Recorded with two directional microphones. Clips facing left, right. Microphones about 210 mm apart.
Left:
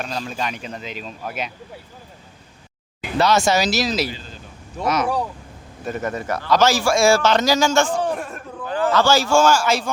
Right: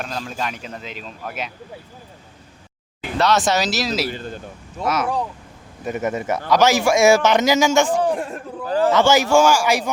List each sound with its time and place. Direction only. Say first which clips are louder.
0.0 s a man's voice: left 1 dB; centre (ahead or behind)
3.2 s a man's voice: left 1 dB; centre (ahead or behind)
4.1 s speech: right 6 dB; 55° right (ahead or behind)
4.8 s a man's voice: left 1 dB; 5° right (ahead or behind)
5.8 s a man's voice: right 2 dB; 15° right (ahead or behind)
8.1 s a sound: right 3 dB; 30° right (ahead or behind)
8.9 s a man's voice: right 1 dB; 20° right (ahead or behind)